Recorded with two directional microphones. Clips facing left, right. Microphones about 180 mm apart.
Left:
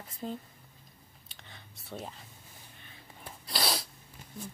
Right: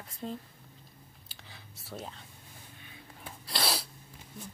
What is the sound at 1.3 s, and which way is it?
Whispering, centre (ahead or behind).